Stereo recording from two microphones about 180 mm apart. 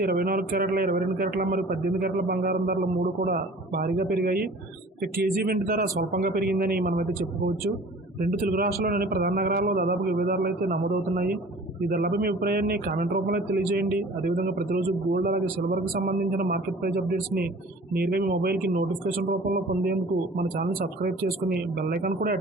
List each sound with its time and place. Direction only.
0.0 s a man's voice: 55° right (ahead or behind)